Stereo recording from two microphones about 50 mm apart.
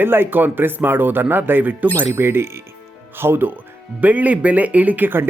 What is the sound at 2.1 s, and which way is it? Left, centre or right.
Speech, right.